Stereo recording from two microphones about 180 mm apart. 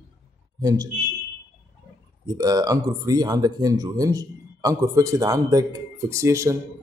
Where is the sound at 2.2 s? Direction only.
20° right (ahead or behind).